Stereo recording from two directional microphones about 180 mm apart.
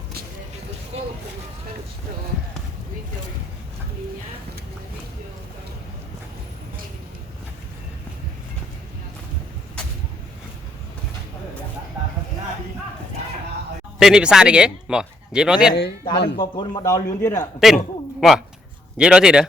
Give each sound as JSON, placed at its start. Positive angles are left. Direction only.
{"t": 14.0, "sound": "a man's voice", "side_deg": -5}
{"t": 16.0, "sound": "speech", "side_deg": 25}
{"t": 17.6, "sound": "a man's voice", "side_deg": 0}